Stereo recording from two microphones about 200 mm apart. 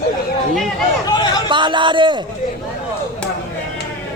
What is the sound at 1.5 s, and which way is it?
Speech, 25° right (ahead or behind).